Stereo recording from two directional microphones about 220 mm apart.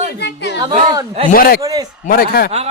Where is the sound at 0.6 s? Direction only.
20° right (ahead or behind).